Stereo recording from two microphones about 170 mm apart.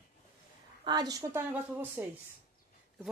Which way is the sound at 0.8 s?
25° right (ahead or behind).